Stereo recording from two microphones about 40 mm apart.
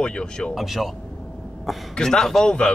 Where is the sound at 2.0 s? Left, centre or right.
Centre.